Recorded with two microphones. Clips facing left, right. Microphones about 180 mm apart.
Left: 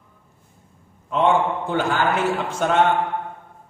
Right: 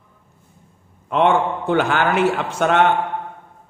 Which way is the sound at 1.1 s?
70° right (ahead or behind).